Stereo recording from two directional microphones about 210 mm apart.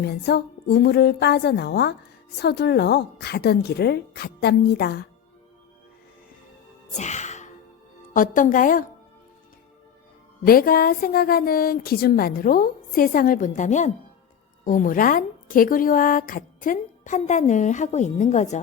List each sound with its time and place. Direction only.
0.0 s a woman's voice: 50° left (ahead or behind)
6.9 s music: 35° left (ahead or behind)
8.1 s a woman's voice: 40° left (ahead or behind)
10.4 s a woman's voice: 45° left (ahead or behind)